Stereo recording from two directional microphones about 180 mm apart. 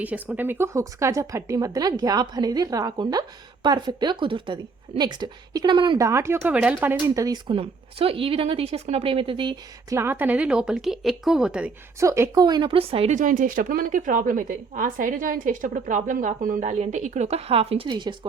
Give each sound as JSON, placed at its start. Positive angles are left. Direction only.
{"t": 0.0, "sound": "a woman's voice", "side_deg": -10}
{"t": 7.1, "sound": "a woman's voice", "side_deg": -20}
{"t": 11.9, "sound": "speech", "side_deg": -15}